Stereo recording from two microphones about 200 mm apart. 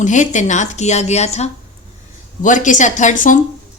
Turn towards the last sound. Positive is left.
turn(degrees=40)  # may be behind; listen again after turning